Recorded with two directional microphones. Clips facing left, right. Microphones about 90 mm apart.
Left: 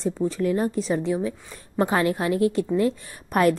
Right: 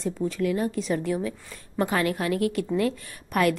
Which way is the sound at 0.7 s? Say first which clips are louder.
Left 2 dB; 25° left (ahead or behind).